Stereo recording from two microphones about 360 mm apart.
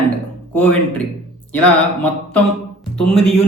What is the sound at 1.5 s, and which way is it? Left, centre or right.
Mantra, centre.